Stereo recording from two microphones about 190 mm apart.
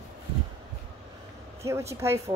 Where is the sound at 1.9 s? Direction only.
15° right (ahead or behind).